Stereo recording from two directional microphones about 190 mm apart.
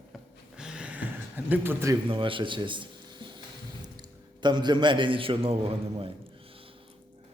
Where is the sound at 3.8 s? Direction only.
20° right (ahead or behind).